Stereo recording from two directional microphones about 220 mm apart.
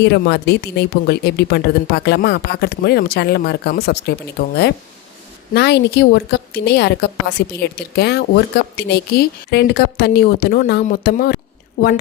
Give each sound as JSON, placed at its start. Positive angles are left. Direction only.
{"t": 0.0, "sound": "speech", "side_deg": 50}